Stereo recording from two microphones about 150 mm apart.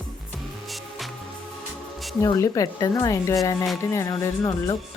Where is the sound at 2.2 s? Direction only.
25° left (ahead or behind).